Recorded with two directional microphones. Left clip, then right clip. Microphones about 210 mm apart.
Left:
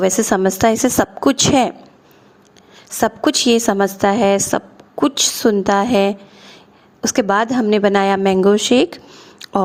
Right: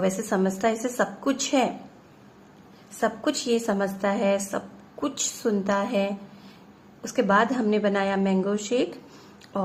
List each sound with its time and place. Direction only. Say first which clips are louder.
0.0 s a woman's voice: left 10 dB; 45° left (ahead or behind)
3.0 s a woman's voice: left 10 dB; 45° left (ahead or behind)
9.4 s a sound: left 12 dB; 50° left (ahead or behind)